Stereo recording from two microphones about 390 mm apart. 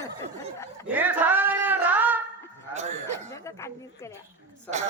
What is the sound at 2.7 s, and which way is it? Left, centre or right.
Speech, centre.